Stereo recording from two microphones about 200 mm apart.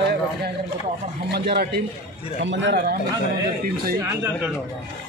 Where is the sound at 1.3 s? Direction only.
55° right (ahead or behind).